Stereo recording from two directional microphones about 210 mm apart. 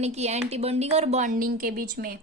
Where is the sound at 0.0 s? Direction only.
30° right (ahead or behind).